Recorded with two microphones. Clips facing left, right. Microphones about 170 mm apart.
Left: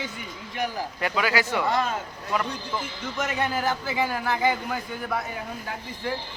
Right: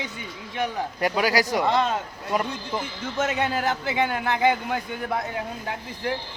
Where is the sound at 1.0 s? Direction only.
40° right (ahead or behind).